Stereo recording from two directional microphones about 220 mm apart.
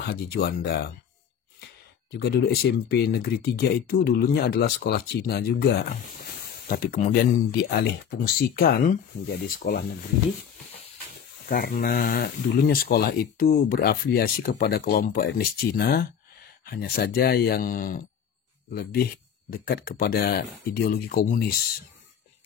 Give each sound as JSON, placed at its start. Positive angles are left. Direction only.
{"t": 0.0, "sound": "speech", "side_deg": 45}
{"t": 2.0, "sound": "speech", "side_deg": 45}
{"t": 11.4, "sound": "speech", "side_deg": 40}